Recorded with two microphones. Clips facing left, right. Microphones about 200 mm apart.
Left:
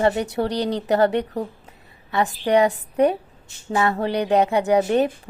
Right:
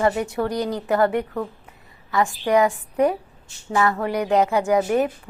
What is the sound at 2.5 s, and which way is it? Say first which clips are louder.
A woman's voice: left 1 dB; 35° left (ahead or behind).